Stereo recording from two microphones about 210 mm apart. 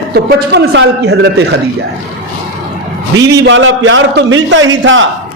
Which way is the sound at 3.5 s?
65° right (ahead or behind).